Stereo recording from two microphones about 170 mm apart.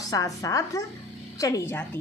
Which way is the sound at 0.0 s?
20° left (ahead or behind).